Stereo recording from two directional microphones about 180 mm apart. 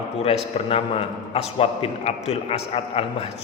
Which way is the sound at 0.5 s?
35° left (ahead or behind).